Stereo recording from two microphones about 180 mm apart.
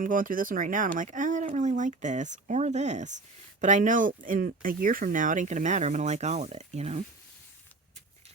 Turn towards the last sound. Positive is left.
turn(degrees=-40)  # may be behind; listen again after turning